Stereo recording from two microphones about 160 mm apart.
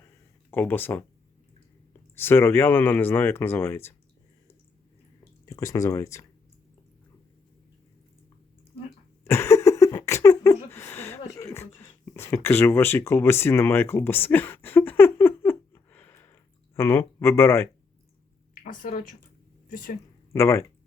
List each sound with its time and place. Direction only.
0.5 s speech: 10° left (ahead or behind)
2.1 s speech: 15° left (ahead or behind)
5.5 s speech: 20° left (ahead or behind)
9.2 s a sound: 15° left (ahead or behind)
18.6 s speech: 55° left (ahead or behind)
20.3 s speech: 15° left (ahead or behind)